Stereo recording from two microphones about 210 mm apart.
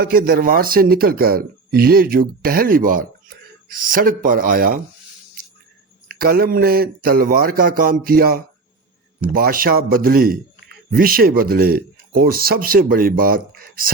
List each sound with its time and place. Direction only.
0.0 s speech: 45° right (ahead or behind)
6.1 s speech: 45° right (ahead or behind)